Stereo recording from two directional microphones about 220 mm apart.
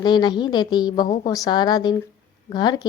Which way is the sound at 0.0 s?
20° left (ahead or behind).